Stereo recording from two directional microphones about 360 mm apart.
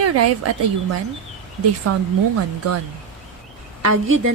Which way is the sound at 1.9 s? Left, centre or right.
Right.